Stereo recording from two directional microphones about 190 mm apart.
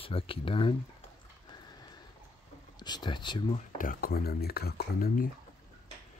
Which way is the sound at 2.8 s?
20° left (ahead or behind).